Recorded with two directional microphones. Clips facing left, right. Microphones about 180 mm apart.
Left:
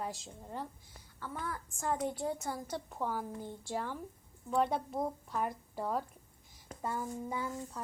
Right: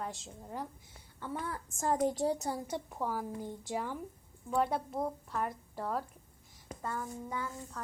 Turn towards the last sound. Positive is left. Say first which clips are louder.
# left 2 dB
turn(degrees=10)  # may be behind; listen again after turning